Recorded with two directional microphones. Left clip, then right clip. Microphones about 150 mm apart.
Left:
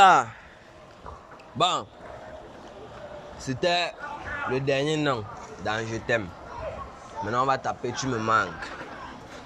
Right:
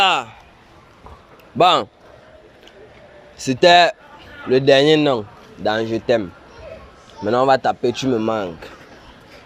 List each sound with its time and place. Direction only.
0.0 s a sound: centre (ahead or behind)
1.5 s speech: 70° right (ahead or behind)
3.3 s a man's voice: 90° right; by 6.2 s 60° right (ahead or behind)
7.3 s speech: 80° right; by 8.4 s 55° right (ahead or behind)